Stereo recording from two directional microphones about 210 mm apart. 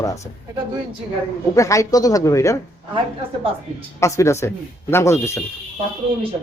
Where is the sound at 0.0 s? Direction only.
15° left (ahead or behind).